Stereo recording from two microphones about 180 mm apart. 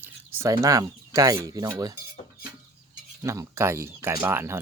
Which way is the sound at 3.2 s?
15° right (ahead or behind).